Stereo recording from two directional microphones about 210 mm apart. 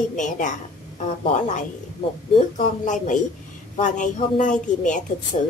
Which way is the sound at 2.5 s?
35° left (ahead or behind).